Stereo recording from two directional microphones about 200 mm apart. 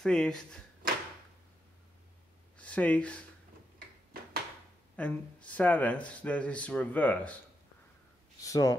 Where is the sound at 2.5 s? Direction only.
5° left (ahead or behind).